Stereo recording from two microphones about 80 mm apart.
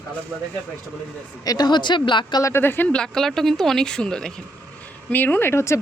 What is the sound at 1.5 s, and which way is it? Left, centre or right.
Speech, left.